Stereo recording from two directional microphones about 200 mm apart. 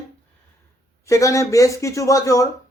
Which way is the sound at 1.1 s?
15° left (ahead or behind).